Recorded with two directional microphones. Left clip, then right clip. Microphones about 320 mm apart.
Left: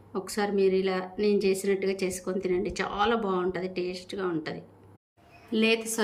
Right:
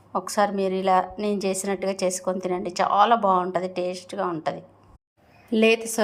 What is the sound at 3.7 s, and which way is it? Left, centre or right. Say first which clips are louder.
Speech: right 5 dB; centre.